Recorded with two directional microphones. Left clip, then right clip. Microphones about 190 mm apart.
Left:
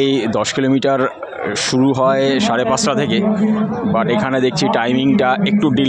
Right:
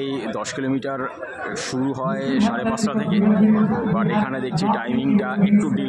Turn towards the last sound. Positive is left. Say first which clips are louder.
# left 5 dB
turn(degrees=40)  # may be behind; listen again after turning